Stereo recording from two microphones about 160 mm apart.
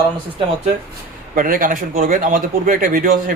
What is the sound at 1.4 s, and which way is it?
Speech, 60° right (ahead or behind).